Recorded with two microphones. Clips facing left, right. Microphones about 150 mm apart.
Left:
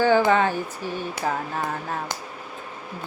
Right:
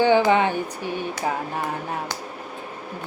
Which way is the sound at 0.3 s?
20° right (ahead or behind).